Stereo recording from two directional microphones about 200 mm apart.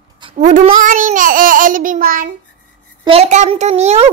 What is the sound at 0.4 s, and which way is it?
Babbling, 40° right (ahead or behind).